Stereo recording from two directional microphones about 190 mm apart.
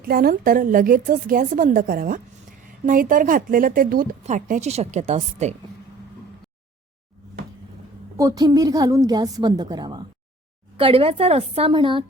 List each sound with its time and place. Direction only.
0.0 s a woman's voice: 50° right (ahead or behind)
8.2 s a woman's voice: 20° right (ahead or behind)